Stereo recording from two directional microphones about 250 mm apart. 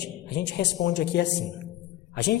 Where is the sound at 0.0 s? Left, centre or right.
Left.